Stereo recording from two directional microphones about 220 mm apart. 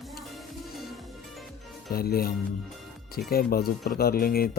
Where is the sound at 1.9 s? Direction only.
45° left (ahead or behind).